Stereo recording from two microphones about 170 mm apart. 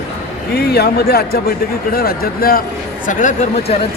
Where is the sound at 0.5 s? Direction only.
65° left (ahead or behind).